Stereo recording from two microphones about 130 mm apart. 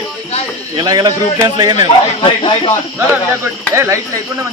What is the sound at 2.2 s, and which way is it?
Speech, 40° left (ahead or behind).